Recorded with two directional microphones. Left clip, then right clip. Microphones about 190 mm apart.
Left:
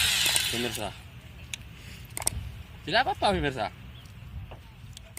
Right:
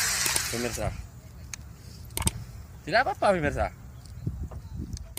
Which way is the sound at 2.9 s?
20° right (ahead or behind).